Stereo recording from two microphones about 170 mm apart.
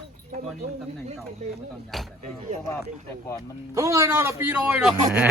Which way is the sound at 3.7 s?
20° right (ahead or behind).